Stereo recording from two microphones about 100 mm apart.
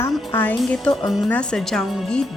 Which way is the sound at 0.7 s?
5° left (ahead or behind).